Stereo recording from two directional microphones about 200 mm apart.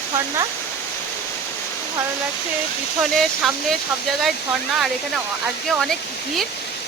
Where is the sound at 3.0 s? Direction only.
Centre (ahead or behind).